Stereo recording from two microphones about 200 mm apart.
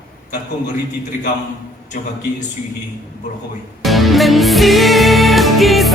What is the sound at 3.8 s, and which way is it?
Music, centre (ahead or behind).